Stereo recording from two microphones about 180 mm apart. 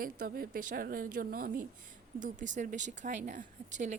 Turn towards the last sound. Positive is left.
turn(degrees=-45)  # may be behind; listen again after turning